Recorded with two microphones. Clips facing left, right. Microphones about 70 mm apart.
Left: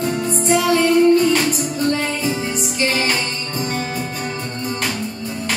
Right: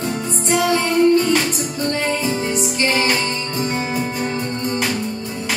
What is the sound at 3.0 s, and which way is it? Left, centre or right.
Music, centre.